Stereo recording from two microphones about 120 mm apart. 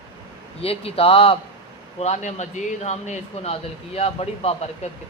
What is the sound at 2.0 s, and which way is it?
Speech, 70° left (ahead or behind).